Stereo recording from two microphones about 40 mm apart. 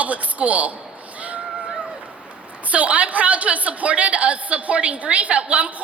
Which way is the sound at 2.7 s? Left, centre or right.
Right.